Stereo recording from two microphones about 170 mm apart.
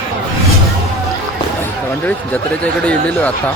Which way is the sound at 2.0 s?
10° left (ahead or behind).